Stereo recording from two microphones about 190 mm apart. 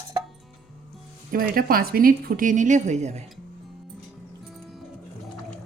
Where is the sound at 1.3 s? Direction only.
50° right (ahead or behind).